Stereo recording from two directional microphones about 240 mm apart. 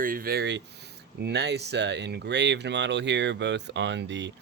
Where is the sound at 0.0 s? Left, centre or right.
Right.